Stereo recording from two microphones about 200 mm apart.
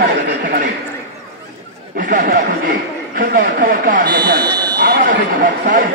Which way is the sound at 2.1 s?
45° right (ahead or behind).